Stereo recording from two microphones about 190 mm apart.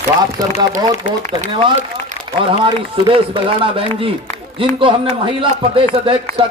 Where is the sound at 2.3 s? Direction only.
25° right (ahead or behind).